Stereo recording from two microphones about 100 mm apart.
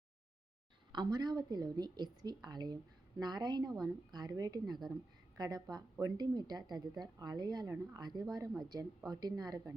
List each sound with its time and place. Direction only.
0.9 s a woman's voice: 45° right (ahead or behind)